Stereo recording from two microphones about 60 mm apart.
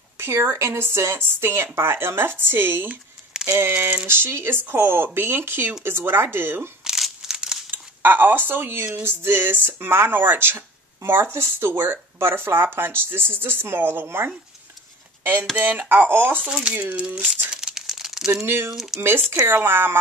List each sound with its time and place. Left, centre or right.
0.2 s a woman's voice: right
6.8 s crumpling: centre
7.7 s speech: right
15.9 s speech: right
16.4 s speech: centre
17.5 s crumpling: centre
18.3 s a woman's voice: right